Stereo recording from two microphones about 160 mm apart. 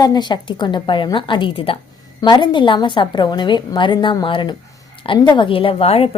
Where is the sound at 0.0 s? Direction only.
25° left (ahead or behind).